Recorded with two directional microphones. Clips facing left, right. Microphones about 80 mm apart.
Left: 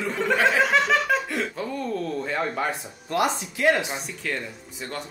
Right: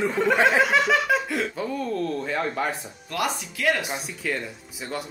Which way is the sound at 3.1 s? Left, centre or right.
Left.